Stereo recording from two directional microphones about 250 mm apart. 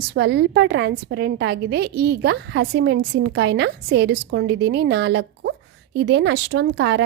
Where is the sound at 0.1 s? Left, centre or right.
Right.